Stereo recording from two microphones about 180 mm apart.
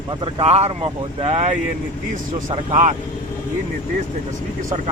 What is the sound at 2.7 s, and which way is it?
Speech, 40° right (ahead or behind).